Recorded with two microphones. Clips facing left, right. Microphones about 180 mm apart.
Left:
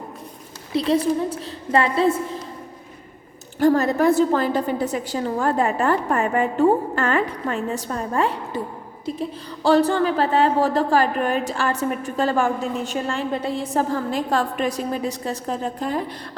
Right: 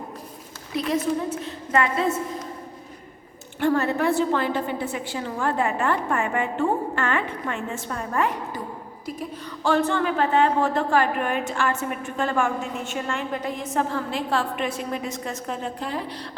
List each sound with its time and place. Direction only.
0.7 s a woman's voice: 30° left (ahead or behind)
3.6 s a woman's voice: 40° left (ahead or behind)